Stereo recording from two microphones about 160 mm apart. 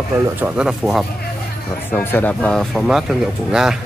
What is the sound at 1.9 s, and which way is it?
Speech, 10° left (ahead or behind).